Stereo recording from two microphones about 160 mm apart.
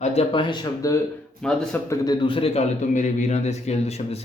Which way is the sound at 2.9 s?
50° left (ahead or behind).